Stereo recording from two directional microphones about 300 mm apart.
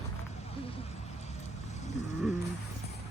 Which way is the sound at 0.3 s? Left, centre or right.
Centre.